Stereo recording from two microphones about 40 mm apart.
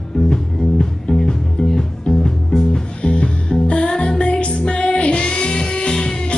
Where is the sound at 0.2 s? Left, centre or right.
Centre.